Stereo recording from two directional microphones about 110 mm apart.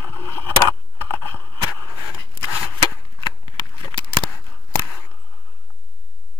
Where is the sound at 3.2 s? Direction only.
45° left (ahead or behind).